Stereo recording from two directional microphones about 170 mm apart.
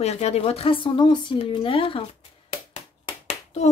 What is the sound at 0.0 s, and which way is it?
Speech, 40° left (ahead or behind).